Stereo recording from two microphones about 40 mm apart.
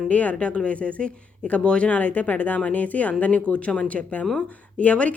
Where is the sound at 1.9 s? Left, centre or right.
Left.